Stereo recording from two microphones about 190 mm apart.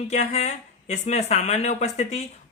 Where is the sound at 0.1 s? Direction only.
35° left (ahead or behind).